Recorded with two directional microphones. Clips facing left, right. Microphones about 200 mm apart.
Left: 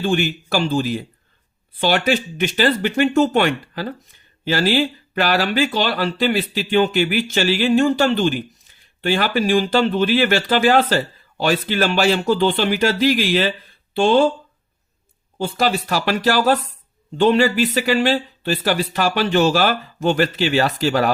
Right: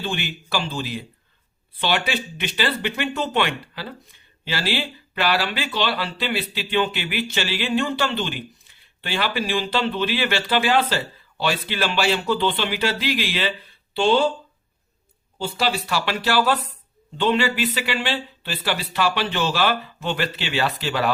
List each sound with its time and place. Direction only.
0.0 s speech: 45° left (ahead or behind)
15.4 s speech: 50° left (ahead or behind)